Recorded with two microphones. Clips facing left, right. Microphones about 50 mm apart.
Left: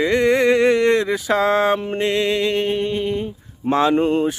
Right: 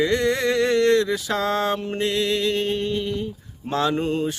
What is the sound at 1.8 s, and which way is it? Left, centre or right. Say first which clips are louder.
Mantra: left 4 dB; left.